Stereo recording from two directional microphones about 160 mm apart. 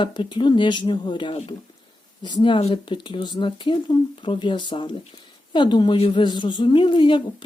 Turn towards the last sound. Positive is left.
turn(degrees=30)  # may be behind; listen again after turning